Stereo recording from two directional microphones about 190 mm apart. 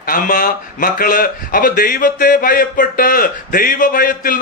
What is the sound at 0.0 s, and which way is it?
Speech, 45° left (ahead or behind).